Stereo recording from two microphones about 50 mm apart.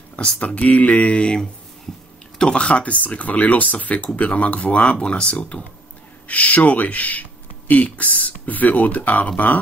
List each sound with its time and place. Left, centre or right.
0.1 s speech: left